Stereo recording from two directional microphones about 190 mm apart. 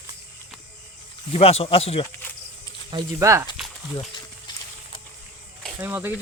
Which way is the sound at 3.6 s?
Centre (ahead or behind).